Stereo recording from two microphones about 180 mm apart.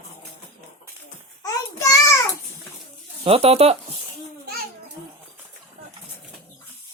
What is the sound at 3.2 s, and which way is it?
Speech, 30° right (ahead or behind).